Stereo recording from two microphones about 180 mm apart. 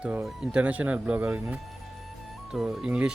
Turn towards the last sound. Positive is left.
turn(degrees=-5)  # may be behind; listen again after turning